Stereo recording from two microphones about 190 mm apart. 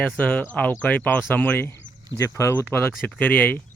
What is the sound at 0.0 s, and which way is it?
Speech, 10° left (ahead or behind).